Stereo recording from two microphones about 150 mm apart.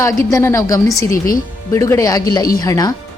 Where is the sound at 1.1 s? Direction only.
70° left (ahead or behind).